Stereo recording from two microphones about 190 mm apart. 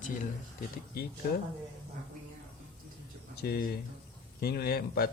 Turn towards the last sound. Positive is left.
turn(degrees=50)  # may be behind; listen again after turning